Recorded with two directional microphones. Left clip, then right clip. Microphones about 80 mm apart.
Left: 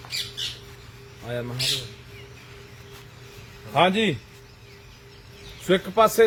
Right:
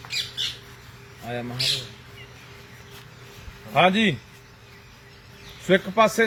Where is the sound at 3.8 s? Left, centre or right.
Left.